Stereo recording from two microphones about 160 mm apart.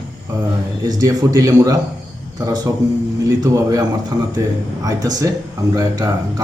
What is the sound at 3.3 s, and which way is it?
A man's voice, 20° right (ahead or behind).